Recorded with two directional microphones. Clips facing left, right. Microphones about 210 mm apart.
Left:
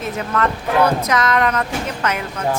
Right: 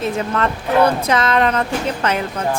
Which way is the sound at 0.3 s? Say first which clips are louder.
Even; 30° right (ahead or behind).